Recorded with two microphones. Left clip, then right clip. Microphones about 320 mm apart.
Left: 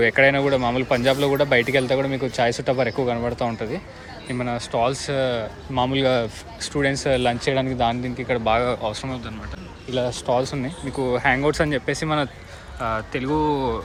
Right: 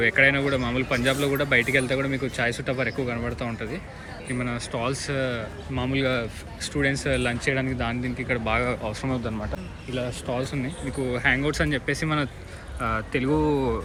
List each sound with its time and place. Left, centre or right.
0.0 s speech: centre
9.9 s speech: left